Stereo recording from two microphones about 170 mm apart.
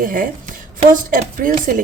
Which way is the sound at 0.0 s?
55° right (ahead or behind).